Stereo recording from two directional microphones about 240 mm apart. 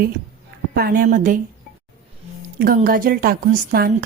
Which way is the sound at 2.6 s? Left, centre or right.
Right.